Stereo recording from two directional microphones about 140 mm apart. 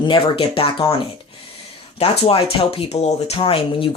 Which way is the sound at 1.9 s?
45° left (ahead or behind).